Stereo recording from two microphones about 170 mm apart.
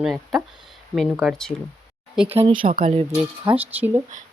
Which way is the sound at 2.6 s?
55° right (ahead or behind).